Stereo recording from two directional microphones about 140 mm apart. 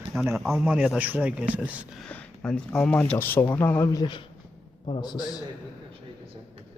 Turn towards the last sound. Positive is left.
turn(degrees=30)  # may be behind; listen again after turning